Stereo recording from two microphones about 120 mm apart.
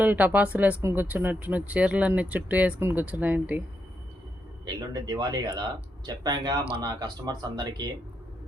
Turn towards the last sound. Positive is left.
turn(degrees=-35)  # may be behind; listen again after turning